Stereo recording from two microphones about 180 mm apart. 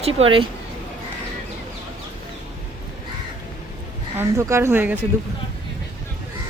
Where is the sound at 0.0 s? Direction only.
30° right (ahead or behind).